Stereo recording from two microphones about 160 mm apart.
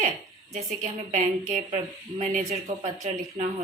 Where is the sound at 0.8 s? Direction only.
50° right (ahead or behind).